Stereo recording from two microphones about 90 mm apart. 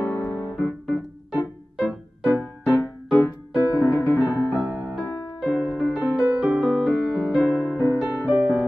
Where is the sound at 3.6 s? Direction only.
30° left (ahead or behind).